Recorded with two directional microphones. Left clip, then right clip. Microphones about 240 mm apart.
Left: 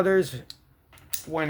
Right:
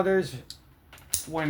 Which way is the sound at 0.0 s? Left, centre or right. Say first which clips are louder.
Left 3 dB; left.